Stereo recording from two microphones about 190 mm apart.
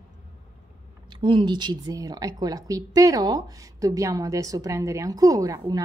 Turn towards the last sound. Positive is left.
turn(degrees=-20)  # may be behind; listen again after turning